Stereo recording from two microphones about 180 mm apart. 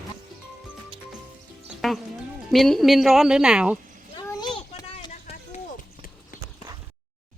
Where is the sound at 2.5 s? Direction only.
Centre (ahead or behind).